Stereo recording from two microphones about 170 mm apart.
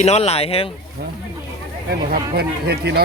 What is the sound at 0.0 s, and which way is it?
Speech, 40° left (ahead or behind).